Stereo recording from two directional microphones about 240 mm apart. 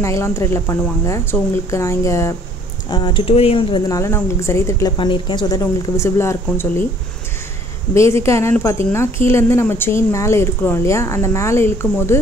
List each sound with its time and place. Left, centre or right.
0.0 s speech: centre
7.9 s speech: centre